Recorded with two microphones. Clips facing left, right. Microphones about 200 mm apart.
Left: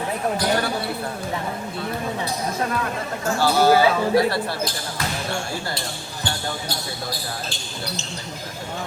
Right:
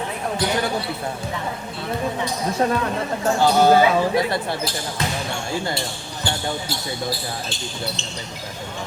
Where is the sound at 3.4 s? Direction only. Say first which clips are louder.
Right 1 dB; 20° right (ahead or behind).